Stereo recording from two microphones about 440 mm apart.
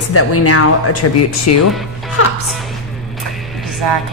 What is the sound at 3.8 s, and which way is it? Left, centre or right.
Speech, right.